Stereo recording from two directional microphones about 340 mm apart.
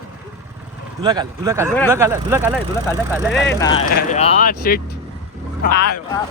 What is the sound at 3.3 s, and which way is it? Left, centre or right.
Speech, left.